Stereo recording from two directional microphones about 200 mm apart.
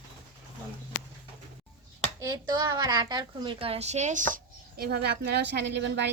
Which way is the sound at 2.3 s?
20° right (ahead or behind).